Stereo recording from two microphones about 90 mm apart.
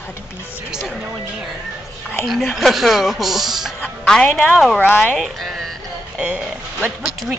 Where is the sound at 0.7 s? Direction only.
5° right (ahead or behind).